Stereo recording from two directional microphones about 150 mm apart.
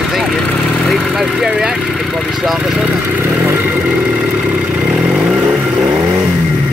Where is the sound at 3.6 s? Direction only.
Centre (ahead or behind).